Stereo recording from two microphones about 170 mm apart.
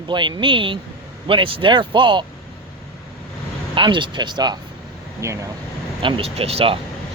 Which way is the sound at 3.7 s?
30° right (ahead or behind).